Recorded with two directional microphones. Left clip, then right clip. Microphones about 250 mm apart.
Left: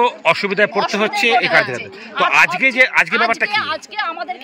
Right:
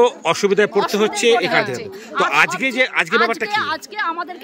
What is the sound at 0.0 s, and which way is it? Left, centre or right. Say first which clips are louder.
Speech: even; centre.